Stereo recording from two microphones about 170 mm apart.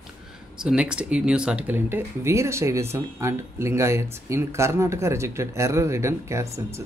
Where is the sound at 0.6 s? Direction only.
5° right (ahead or behind).